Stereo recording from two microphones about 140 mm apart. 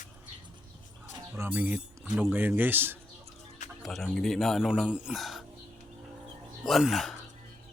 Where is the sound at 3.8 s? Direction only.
Centre (ahead or behind).